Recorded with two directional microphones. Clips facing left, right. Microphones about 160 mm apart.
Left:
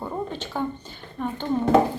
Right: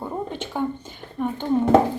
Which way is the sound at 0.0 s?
15° right (ahead or behind).